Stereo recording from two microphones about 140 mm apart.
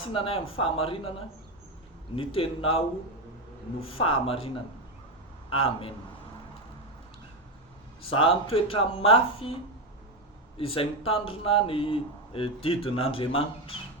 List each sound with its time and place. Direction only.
0.0 s speech: 40° left (ahead or behind)
2.1 s speech: 40° left (ahead or behind)
3.8 s speech: 40° left (ahead or behind)
8.1 s speech: 40° left (ahead or behind)
10.6 s speech: 40° left (ahead or behind)